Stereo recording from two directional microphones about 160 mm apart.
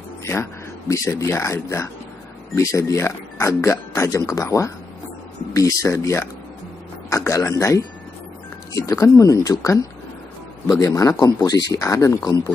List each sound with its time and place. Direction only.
0.2 s speech: 15° left (ahead or behind)